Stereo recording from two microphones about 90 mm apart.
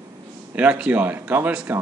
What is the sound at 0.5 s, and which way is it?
Speech, 15° right (ahead or behind).